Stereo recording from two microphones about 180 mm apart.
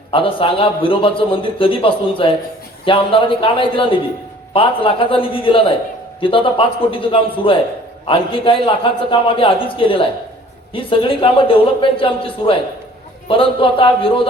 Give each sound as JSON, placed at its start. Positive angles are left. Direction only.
{"t": 0.1, "sound": "a man's voice", "side_deg": 30}